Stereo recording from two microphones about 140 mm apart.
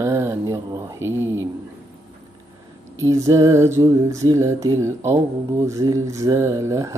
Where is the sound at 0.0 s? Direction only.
20° right (ahead or behind).